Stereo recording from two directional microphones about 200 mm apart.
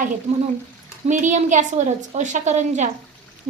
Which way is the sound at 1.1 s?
40° right (ahead or behind).